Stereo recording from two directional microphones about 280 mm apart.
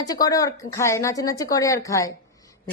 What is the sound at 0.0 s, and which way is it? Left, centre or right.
Speech, centre.